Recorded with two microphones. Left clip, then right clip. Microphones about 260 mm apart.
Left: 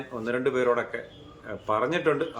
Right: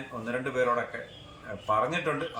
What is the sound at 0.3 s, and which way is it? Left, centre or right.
Speech, centre.